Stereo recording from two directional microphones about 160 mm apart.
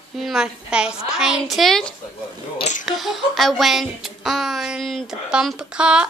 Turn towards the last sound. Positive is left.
turn(degrees=-5)  # may be behind; listen again after turning